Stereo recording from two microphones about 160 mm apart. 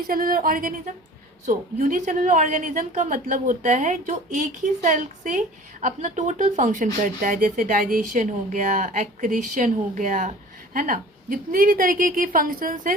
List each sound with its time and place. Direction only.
0.1 s a woman's voice: 65° right (ahead or behind)